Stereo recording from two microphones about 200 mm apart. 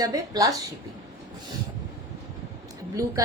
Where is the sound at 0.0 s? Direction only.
15° right (ahead or behind).